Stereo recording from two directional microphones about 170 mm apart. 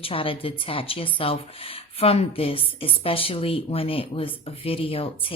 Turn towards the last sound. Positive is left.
turn(degrees=35)  # may be behind; listen again after turning